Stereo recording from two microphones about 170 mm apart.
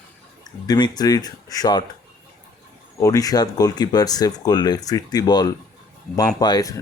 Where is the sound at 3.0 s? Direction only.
20° left (ahead or behind).